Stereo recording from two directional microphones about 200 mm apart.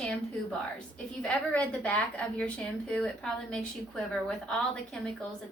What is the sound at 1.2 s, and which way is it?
A woman's voice, 5° left (ahead or behind).